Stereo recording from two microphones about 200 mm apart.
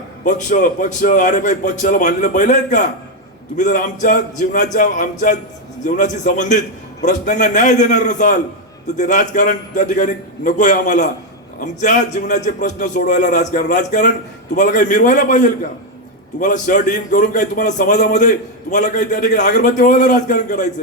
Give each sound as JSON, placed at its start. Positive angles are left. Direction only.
{"t": 0.3, "sound": "a man's voice", "side_deg": 40}